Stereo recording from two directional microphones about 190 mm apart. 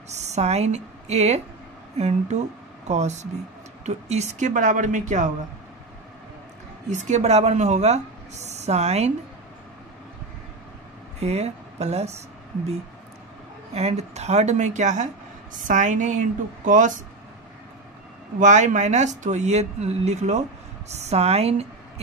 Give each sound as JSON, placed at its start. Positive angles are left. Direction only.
{"t": 0.1, "sound": "a woman's voice", "side_deg": -35}
{"t": 6.9, "sound": "a woman's voice", "side_deg": -40}
{"t": 11.1, "sound": "a woman's voice", "side_deg": -35}
{"t": 13.7, "sound": "a woman's voice", "side_deg": -35}
{"t": 18.4, "sound": "a woman's voice", "side_deg": -40}